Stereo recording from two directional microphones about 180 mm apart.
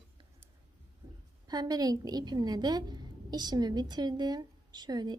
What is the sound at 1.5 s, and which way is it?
A woman's voice, 20° right (ahead or behind).